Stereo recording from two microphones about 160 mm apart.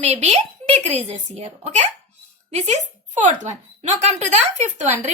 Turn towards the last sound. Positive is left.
turn(degrees=-50)  # may be behind; listen again after turning